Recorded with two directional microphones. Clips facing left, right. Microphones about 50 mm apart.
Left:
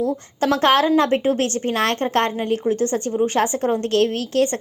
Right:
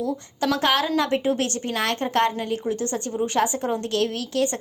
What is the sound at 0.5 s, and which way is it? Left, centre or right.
A woman's voice, left.